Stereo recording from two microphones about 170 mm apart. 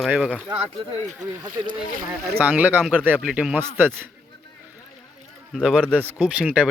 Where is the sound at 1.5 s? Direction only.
55° right (ahead or behind).